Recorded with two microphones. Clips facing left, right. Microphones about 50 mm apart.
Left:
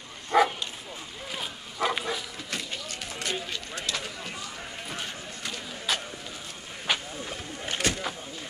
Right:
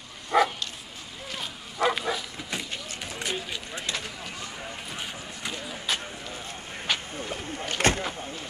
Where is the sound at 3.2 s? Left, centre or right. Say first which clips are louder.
Even; centre.